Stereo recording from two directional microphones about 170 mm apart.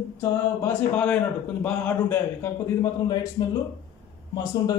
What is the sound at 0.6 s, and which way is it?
A man's voice, 5° left (ahead or behind).